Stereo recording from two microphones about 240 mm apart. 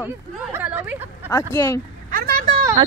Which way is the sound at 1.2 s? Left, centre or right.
Centre.